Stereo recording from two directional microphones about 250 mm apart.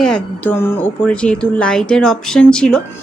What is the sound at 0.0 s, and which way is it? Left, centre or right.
Music, centre.